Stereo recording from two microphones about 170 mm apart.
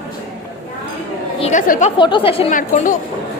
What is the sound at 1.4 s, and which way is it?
Speech, 45° left (ahead or behind).